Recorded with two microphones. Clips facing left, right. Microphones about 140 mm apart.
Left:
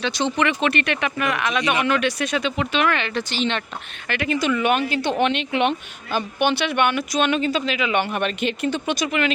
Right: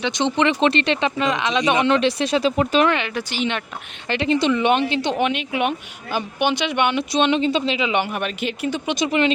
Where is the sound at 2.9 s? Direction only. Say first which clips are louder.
Right 1 dB; 10° right (ahead or behind).